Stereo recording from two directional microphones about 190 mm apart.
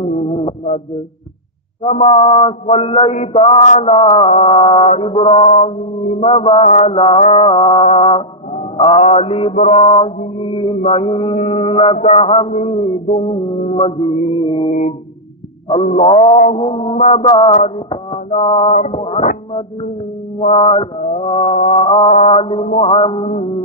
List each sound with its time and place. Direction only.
0.0 s music: 35° left (ahead or behind)
1.8 s mantra: 30° left (ahead or behind)
5.4 s music: 35° left (ahead or behind)
6.1 s mantra: 30° left (ahead or behind)
6.6 s music: 35° left (ahead or behind)
9.7 s mantra: 30° left (ahead or behind)
13.1 s music: 30° left (ahead or behind)
13.7 s mantra: 30° left (ahead or behind)
14.7 s music: 40° left (ahead or behind)
16.0 s mantra: 30° left (ahead or behind)
16.3 s music: 35° left (ahead or behind)
20.3 s mantra: 30° left (ahead or behind)
21.7 s music: 25° left (ahead or behind)
22.8 s mantra: 30° left (ahead or behind)